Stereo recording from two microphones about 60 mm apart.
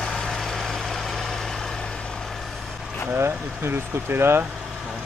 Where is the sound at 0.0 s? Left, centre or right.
Centre.